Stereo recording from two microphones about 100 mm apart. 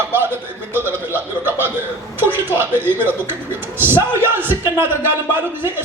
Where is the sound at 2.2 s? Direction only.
20° right (ahead or behind).